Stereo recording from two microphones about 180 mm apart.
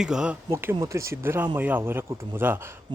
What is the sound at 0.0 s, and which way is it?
Speech, 5° right (ahead or behind).